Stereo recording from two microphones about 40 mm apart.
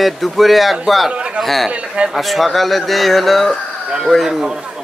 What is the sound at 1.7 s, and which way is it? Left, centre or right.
Speech, right.